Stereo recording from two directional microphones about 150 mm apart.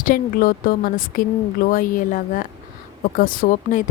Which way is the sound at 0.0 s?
65° left (ahead or behind).